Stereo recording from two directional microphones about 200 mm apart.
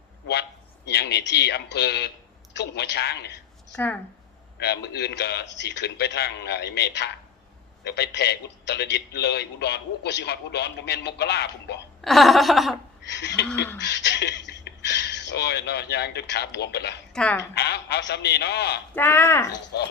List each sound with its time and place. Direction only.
0.9 s a man's voice: 55° left (ahead or behind)
4.6 s a man's voice: 55° left (ahead or behind)
12.0 s laughter: centre (ahead or behind)
13.1 s a man's voice: 60° left (ahead or behind)
18.9 s speech: 10° left (ahead or behind)
19.7 s a man's voice: 55° left (ahead or behind)